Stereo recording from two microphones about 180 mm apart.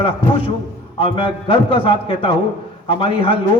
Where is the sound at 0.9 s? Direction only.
30° left (ahead or behind).